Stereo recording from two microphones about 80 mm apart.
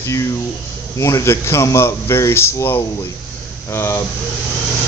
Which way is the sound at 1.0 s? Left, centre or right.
Left.